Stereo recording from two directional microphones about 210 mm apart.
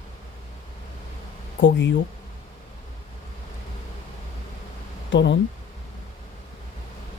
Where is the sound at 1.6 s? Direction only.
60° left (ahead or behind).